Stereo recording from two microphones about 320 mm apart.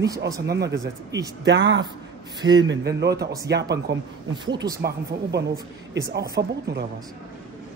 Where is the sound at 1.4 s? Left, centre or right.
Right.